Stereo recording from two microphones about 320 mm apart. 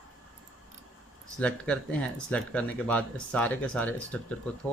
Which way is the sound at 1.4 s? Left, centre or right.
Centre.